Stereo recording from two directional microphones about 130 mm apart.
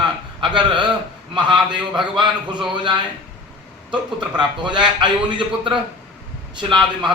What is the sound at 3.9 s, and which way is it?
Speech, 35° right (ahead or behind).